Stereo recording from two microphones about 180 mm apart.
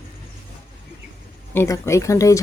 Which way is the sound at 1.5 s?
15° left (ahead or behind).